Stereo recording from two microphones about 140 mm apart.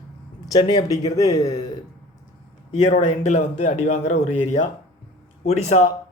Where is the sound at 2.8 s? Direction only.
60° left (ahead or behind).